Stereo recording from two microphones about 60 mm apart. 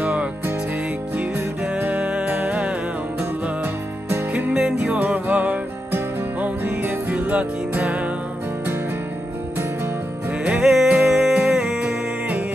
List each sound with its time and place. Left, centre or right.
0.0 s music: right
4.3 s music: right
4.6 s music: centre
4.9 s music: right
10.4 s music: centre